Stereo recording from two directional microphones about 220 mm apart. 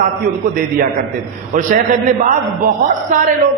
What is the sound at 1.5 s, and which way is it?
A man's voice, 35° right (ahead or behind).